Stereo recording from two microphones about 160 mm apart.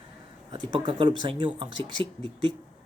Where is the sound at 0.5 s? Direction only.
30° right (ahead or behind).